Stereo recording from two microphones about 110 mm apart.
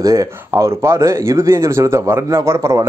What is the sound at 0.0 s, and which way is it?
Speech, 30° right (ahead or behind).